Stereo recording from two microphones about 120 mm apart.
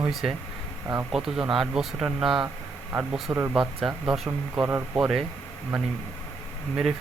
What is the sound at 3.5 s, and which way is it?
Speech, 5° right (ahead or behind).